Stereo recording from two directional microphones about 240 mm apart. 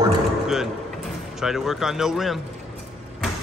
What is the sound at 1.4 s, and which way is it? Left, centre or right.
Speech, centre.